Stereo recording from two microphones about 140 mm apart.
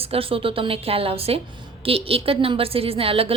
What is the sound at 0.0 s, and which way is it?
A woman's voice, 45° right (ahead or behind).